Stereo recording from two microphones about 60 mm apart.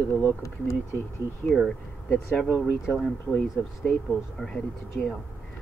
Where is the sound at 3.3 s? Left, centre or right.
Left.